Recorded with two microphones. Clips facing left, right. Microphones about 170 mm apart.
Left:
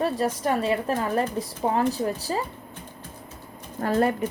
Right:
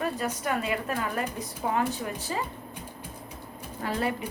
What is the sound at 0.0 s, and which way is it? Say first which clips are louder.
Speech: left 6 dB; 35° left (ahead or behind).